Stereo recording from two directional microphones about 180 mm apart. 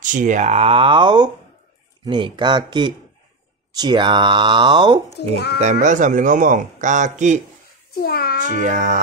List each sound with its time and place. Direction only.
0.0 s speech: 45° right (ahead or behind); by 5.3 s 25° right (ahead or behind)
5.3 s speech: 65° left (ahead or behind)
5.6 s speech: 40° right (ahead or behind)
8.0 s speech: 60° left (ahead or behind)
8.5 s speech: 45° right (ahead or behind)